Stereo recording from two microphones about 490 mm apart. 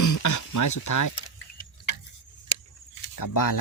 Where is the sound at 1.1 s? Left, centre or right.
Left.